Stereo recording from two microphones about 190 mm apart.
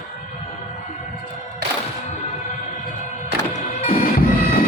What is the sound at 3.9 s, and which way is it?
Music, 50° left (ahead or behind).